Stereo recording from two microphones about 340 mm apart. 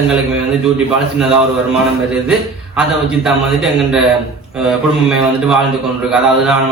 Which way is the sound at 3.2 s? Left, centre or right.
Centre.